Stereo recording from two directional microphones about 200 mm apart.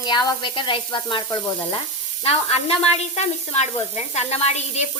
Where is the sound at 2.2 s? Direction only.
30° left (ahead or behind).